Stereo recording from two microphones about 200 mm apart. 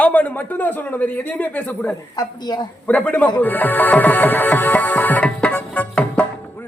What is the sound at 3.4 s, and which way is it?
Music, 10° left (ahead or behind).